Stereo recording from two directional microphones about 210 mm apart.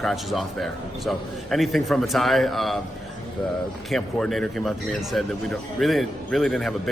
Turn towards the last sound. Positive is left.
turn(degrees=0)  # may be behind; listen again after turning